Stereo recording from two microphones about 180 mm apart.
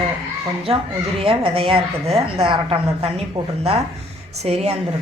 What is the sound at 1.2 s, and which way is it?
A woman's voice, 30° right (ahead or behind).